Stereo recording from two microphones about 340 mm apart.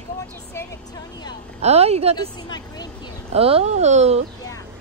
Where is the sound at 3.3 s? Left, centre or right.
Centre.